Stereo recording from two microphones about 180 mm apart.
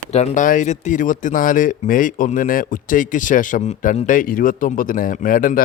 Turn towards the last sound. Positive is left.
turn(degrees=50)  # may be behind; listen again after turning